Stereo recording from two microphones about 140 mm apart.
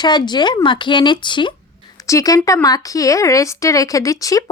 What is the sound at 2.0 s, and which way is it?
Speech, 25° left (ahead or behind).